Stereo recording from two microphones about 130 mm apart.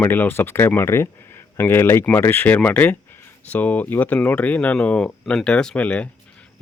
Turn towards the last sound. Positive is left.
turn(degrees=10)  # may be behind; listen again after turning